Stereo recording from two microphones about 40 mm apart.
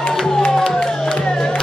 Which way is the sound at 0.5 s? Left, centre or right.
Centre.